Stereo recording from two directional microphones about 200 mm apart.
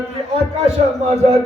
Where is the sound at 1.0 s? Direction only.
30° right (ahead or behind).